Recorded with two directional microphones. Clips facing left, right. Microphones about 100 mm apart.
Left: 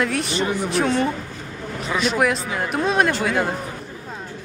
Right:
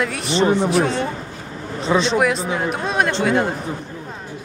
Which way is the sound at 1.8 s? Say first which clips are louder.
Right 5 dB; 25° right (ahead or behind).